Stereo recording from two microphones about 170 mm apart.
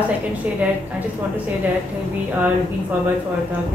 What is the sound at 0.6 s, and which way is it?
Speech, 5° right (ahead or behind).